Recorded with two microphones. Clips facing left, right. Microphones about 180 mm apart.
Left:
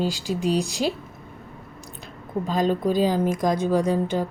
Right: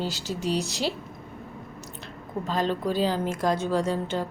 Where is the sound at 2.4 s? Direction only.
10° left (ahead or behind).